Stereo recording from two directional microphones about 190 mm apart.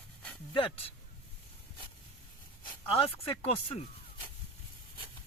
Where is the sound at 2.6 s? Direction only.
30° left (ahead or behind).